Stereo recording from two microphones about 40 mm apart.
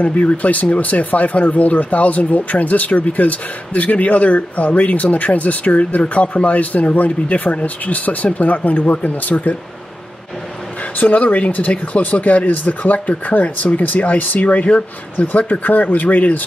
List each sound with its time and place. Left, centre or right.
0.0 s speech: left
11.0 s speech: left